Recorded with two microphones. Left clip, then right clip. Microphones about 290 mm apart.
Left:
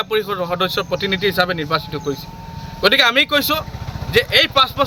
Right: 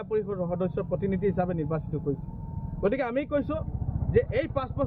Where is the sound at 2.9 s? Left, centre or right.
Centre.